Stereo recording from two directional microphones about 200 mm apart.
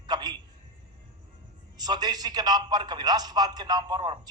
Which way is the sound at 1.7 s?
20° right (ahead or behind).